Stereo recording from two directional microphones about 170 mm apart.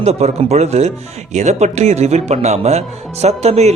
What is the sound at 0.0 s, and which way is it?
Speech, 40° right (ahead or behind).